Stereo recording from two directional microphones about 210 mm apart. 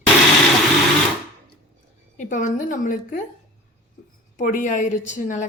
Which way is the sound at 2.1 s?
35° left (ahead or behind).